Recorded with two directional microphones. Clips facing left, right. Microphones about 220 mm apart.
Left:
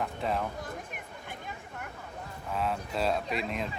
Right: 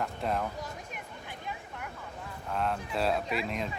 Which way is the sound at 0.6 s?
50° left (ahead or behind).